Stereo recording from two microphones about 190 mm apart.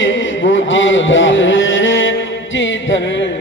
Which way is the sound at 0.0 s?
75° left (ahead or behind).